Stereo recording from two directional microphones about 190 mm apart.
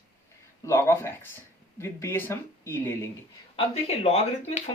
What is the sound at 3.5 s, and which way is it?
Speech, 30° left (ahead or behind).